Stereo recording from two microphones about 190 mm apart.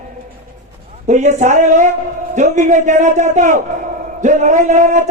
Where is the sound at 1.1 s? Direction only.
40° right (ahead or behind).